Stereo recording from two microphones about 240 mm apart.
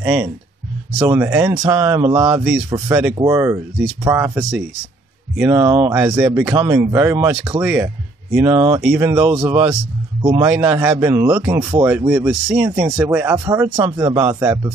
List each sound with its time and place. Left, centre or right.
0.0 s a man's voice: centre